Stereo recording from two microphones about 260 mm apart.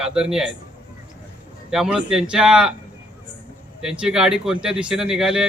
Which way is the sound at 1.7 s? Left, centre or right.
Centre.